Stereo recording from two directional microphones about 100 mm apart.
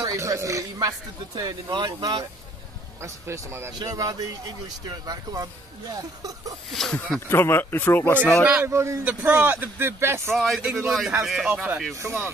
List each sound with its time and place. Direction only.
0.0 s speech: 35° right (ahead or behind)
3.0 s speech: 30° right (ahead or behind)
6.7 s speech: 5° left (ahead or behind)
7.2 s speech: 25° left (ahead or behind)
8.6 s speech: 30° right (ahead or behind)
9.0 s speech: 15° right (ahead or behind)
10.3 s speech: centre (ahead or behind)
10.6 s speech: 10° right (ahead or behind)
11.9 s speech: 25° right (ahead or behind)